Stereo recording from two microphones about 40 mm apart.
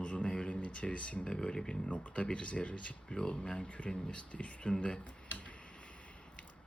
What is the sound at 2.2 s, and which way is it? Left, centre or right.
Speech, left.